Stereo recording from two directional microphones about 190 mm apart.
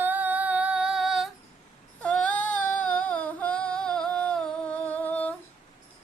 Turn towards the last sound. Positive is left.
turn(degrees=10)  # may be behind; listen again after turning